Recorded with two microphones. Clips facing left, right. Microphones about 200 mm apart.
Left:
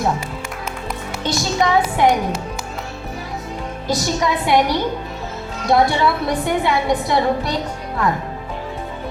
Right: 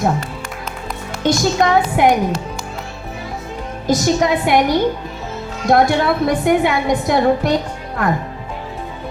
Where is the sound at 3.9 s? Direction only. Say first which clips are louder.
Right 5 dB; 50° right (ahead or behind).